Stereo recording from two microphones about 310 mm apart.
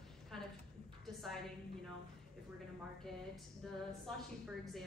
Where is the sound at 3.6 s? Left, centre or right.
Centre.